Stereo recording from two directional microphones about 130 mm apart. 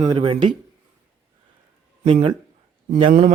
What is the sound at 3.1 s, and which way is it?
Speech, 75° right (ahead or behind).